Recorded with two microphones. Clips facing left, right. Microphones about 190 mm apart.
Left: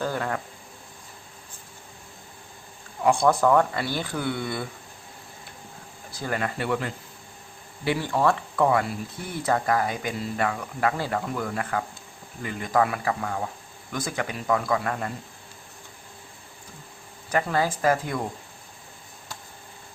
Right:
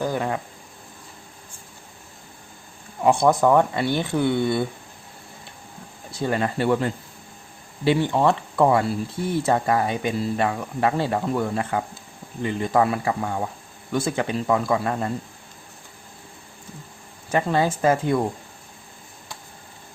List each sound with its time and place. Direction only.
0.0 s cricket: 15° right (ahead or behind)
3.0 s speech: 20° right (ahead or behind)
6.1 s speech: 25° right (ahead or behind)
17.2 s speech: 25° right (ahead or behind)